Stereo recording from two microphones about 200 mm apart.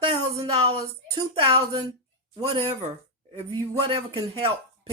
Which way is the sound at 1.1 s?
25° right (ahead or behind).